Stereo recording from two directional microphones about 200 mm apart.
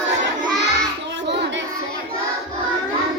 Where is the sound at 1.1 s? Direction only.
60° right (ahead or behind).